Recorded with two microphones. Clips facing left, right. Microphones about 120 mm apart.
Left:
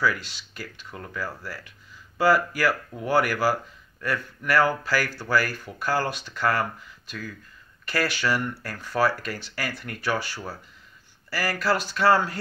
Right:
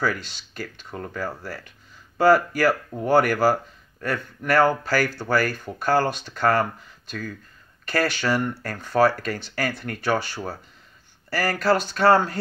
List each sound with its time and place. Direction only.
0.6 s speech: 35° right (ahead or behind)